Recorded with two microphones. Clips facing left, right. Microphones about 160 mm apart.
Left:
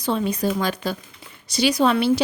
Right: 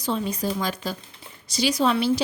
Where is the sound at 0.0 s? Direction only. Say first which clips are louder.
Left 4 dB; 60° left (ahead or behind).